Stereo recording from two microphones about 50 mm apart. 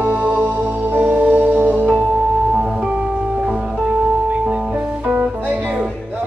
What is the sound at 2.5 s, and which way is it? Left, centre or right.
Music, centre.